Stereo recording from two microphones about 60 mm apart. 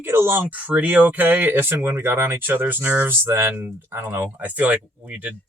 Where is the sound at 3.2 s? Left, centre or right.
Right.